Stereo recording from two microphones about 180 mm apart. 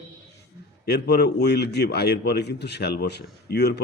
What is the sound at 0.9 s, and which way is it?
A man's voice, 65° left (ahead or behind).